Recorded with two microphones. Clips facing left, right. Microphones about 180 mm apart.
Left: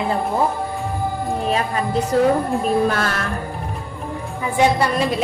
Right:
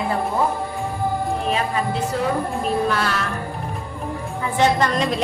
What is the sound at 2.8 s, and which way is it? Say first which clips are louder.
Speech: left 2 dB; 45° left (ahead or behind).